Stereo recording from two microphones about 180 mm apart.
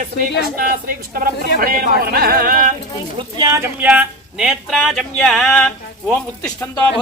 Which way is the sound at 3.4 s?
15° right (ahead or behind).